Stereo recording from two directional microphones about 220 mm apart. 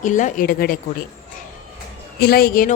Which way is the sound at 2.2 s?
45° left (ahead or behind).